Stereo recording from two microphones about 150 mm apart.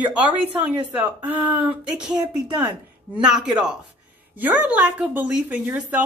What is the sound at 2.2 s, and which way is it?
Speech, 30° right (ahead or behind).